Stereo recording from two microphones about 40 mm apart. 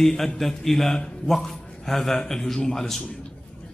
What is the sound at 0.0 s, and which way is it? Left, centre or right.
A man's voice, centre.